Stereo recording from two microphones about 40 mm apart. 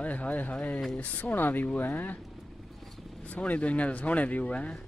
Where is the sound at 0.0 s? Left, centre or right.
Left.